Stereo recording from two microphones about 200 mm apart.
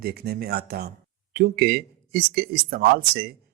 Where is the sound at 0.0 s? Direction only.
50° right (ahead or behind).